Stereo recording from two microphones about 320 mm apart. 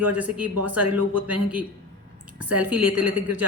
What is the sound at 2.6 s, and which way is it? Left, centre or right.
Speech, centre.